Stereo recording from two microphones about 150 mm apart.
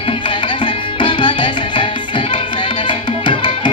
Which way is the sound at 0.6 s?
35° left (ahead or behind).